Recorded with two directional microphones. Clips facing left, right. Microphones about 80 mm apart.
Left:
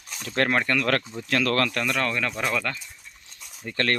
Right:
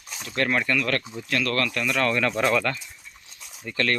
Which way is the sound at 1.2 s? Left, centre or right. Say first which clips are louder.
Left 2 dB; left.